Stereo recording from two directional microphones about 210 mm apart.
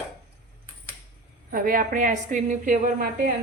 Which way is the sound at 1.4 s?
45° right (ahead or behind).